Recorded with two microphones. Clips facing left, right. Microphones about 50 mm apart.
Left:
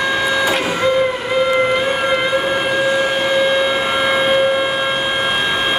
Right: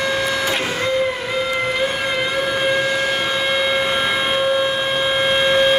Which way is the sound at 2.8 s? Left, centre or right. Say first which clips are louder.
Left 3 dB; centre.